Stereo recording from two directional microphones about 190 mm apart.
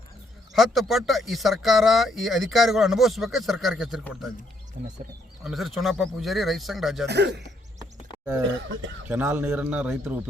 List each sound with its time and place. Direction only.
0.5 s speech: centre (ahead or behind)
4.8 s speech: 50° right (ahead or behind)
5.4 s speech: centre (ahead or behind)
7.1 s speech: 60° right (ahead or behind)
9.0 s a man's voice: 10° right (ahead or behind)